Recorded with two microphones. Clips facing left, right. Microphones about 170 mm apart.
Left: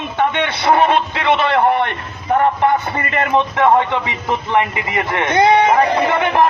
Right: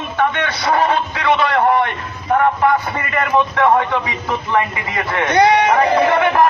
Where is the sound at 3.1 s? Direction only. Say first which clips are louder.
Even; 25° left (ahead or behind).